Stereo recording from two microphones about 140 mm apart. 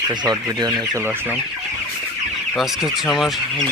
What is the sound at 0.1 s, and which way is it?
Speech, 30° right (ahead or behind).